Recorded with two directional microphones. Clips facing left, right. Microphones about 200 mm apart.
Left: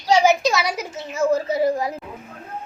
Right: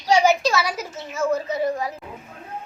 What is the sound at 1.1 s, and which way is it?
Speech, 30° left (ahead or behind).